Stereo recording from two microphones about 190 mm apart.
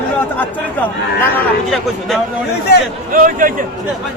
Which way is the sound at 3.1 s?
45° right (ahead or behind).